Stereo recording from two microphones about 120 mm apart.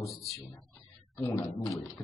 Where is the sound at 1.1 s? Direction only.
25° left (ahead or behind).